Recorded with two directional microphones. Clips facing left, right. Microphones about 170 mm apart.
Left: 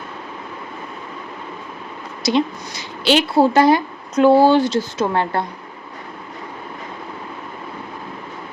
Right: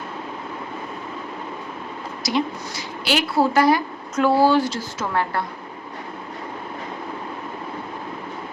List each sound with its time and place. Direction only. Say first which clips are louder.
2.2 s a woman's voice: left 5 dB; 25° left (ahead or behind)